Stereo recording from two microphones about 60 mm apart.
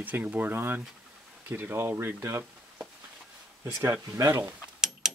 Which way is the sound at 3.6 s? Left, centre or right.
Right.